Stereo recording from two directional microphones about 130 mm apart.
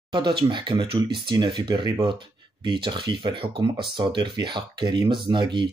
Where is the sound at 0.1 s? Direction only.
40° right (ahead or behind).